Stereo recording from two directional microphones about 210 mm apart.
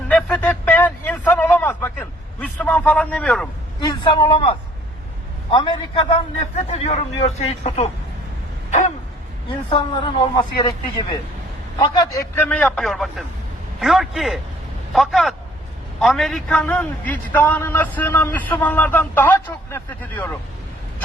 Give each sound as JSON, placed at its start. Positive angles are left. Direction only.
{"t": 0.1, "sound": "a sound", "side_deg": 5}
{"t": 3.8, "sound": "a man's voice", "side_deg": 20}
{"t": 9.6, "sound": "a man's voice", "side_deg": 25}